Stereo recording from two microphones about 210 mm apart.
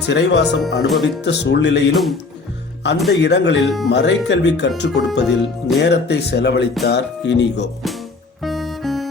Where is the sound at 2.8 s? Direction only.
55° left (ahead or behind).